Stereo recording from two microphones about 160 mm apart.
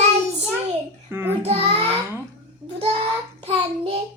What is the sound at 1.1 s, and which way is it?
Child singing, 15° right (ahead or behind).